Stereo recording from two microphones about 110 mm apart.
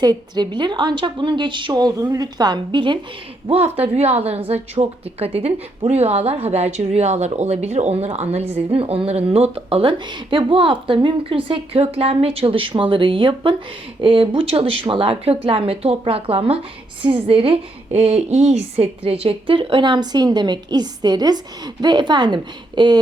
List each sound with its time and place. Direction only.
0.0 s a woman's voice: 40° right (ahead or behind)
3.5 s a woman's voice: 75° right (ahead or behind); by 23.0 s 45° right (ahead or behind)